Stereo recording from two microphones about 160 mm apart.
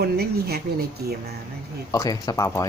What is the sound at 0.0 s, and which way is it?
Speech, 80° right.